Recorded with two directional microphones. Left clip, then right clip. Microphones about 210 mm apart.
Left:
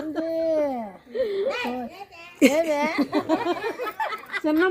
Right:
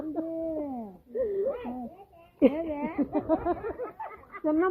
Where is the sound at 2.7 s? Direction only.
75° left (ahead or behind).